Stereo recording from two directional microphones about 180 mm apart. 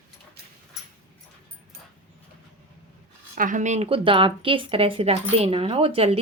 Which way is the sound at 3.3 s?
45° right (ahead or behind).